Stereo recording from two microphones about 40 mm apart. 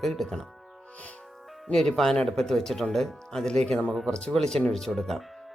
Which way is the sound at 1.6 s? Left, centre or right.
Centre.